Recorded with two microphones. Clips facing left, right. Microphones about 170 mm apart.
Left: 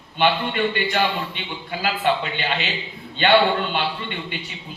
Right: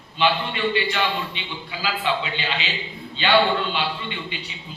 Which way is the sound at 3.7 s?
50° left (ahead or behind).